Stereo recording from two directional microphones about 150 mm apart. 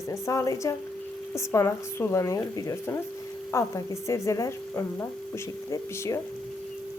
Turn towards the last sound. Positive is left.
turn(degrees=20)  # may be behind; listen again after turning